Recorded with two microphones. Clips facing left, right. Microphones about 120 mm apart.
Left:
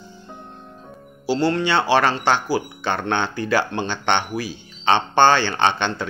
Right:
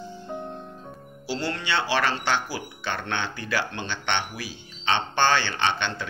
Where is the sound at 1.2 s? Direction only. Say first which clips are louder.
Left 10 dB; 45° left (ahead or behind).